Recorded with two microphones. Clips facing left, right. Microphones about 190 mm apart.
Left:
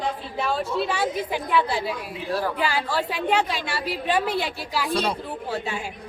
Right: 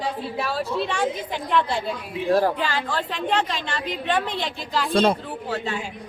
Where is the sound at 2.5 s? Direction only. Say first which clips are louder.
Left 1 dB; 10° left (ahead or behind).